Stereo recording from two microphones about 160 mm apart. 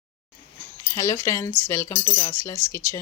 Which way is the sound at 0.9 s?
20° left (ahead or behind).